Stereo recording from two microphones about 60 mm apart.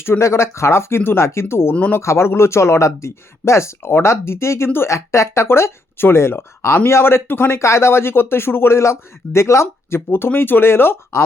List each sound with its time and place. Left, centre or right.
0.0 s speech: left
4.9 s speech: left
7.6 s speech: left
10.1 s speech: left